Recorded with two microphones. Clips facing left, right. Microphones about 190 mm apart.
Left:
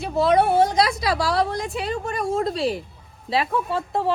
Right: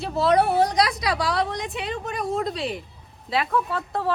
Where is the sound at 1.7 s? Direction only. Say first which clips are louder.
Left 3 dB; 35° left (ahead or behind).